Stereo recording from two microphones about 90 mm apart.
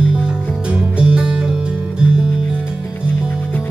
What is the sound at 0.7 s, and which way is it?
Music, 10° right (ahead or behind).